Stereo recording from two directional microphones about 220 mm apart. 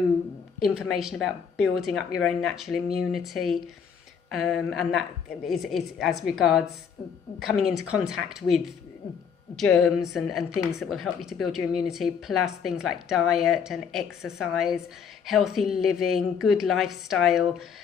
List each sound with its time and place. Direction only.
0.6 s speech: centre (ahead or behind)
9.6 s speech: centre (ahead or behind)